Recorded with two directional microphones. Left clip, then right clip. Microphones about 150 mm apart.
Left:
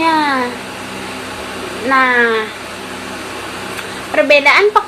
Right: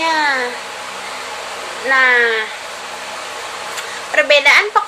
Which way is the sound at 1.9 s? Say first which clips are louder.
Even; 20° right (ahead or behind).